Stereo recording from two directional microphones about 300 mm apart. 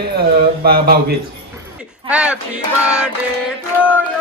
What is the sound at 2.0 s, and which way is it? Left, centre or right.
Music, centre.